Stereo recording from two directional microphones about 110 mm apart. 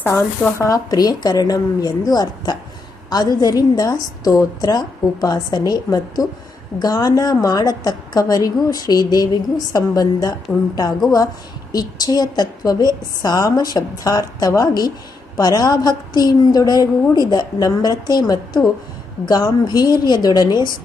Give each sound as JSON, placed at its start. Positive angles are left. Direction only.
{"t": 0.0, "sound": "a woman's voice", "side_deg": 20}
{"t": 11.7, "sound": "a woman's voice", "side_deg": 35}